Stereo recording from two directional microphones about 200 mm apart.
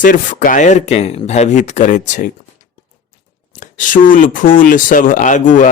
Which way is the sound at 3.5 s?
40° left (ahead or behind).